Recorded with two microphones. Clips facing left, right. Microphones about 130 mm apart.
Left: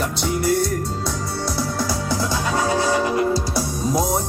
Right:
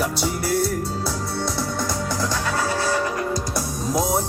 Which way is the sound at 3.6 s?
Centre (ahead or behind).